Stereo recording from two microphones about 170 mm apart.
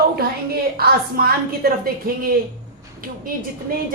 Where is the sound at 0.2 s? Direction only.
65° right (ahead or behind).